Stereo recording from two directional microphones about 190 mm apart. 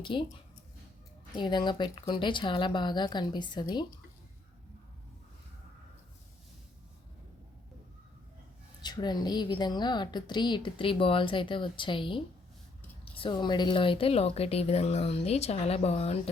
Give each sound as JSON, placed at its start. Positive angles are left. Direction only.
{"t": 0.0, "sound": "a woman's voice", "side_deg": 25}
{"t": 1.4, "sound": "a woman's voice", "side_deg": 25}
{"t": 8.8, "sound": "a woman's voice", "side_deg": 20}